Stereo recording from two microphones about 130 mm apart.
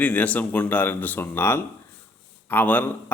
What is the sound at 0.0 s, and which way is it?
A man's voice, 10° left (ahead or behind).